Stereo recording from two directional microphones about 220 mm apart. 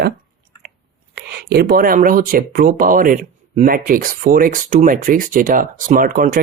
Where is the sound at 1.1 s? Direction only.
45° right (ahead or behind).